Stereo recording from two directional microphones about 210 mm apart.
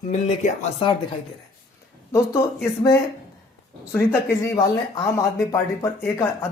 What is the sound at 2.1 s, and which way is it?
Speech, 10° left (ahead or behind).